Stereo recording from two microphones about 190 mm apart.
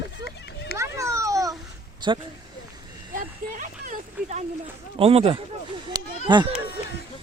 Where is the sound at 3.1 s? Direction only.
45° right (ahead or behind).